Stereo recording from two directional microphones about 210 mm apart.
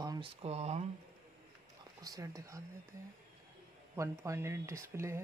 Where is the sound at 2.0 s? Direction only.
15° right (ahead or behind).